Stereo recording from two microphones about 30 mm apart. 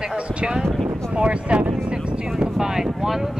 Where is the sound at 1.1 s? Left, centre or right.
Right.